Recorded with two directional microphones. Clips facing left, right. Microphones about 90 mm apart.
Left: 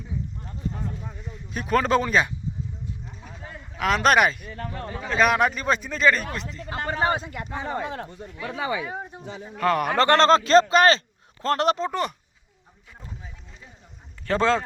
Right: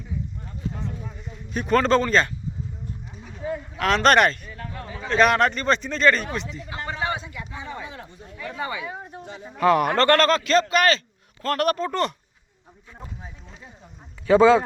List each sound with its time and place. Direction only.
1.2 s speech: centre (ahead or behind)
3.8 s a man's voice: 5° left (ahead or behind)
4.4 s speech: 45° left (ahead or behind)
5.0 s a man's voice: 5° left (ahead or behind)
6.7 s a man's voice: 45° left (ahead or behind)
9.6 s a man's voice: centre (ahead or behind)
10.0 s speech: 20° left (ahead or behind)
14.3 s a man's voice: 10° right (ahead or behind)